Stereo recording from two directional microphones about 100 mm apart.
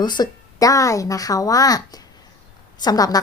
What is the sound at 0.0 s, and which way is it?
Speech, 45° left (ahead or behind).